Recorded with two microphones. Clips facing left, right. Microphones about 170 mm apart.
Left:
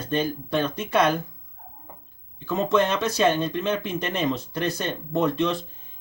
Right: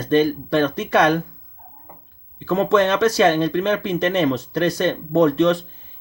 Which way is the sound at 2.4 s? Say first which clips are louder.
Right 5 dB; 90° right.